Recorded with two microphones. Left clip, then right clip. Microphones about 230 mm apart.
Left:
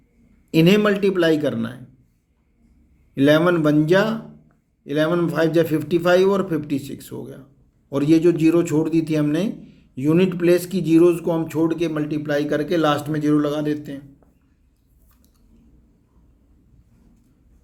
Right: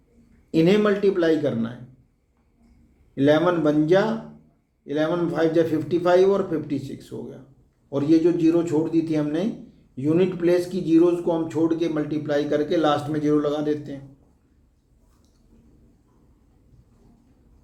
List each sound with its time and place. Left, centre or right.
0.5 s a man's voice: left
3.2 s a man's voice: left